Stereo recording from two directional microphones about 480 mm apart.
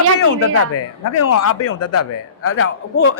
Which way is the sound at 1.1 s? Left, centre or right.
Left.